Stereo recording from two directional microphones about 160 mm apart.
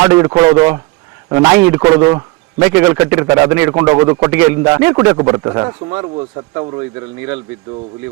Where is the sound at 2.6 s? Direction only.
15° right (ahead or behind).